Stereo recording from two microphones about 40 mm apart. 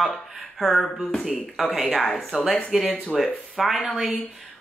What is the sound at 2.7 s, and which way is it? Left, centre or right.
Speech, right.